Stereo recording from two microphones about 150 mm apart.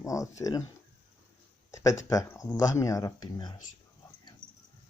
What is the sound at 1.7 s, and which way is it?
Speech, 20° left (ahead or behind).